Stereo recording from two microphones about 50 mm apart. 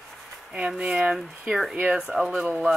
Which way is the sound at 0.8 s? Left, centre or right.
Centre.